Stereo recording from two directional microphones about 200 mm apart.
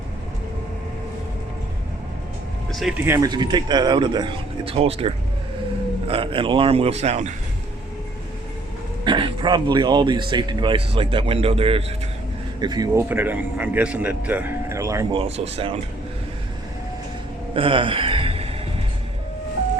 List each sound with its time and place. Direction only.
2.7 s speech: centre (ahead or behind)
3.1 s speech: 20° right (ahead or behind)
9.0 s speech: 25° right (ahead or behind)
15.2 s speech: 30° right (ahead or behind)
17.5 s a sound: 25° right (ahead or behind)